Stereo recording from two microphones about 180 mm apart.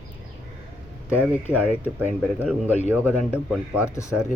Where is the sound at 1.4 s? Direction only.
10° left (ahead or behind).